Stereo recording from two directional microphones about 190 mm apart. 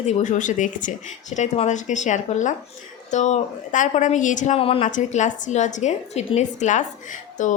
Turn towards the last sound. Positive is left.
turn(degrees=40)  # may be behind; listen again after turning